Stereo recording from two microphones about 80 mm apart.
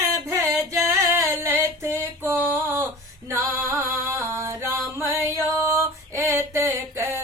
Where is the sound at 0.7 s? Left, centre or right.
Right.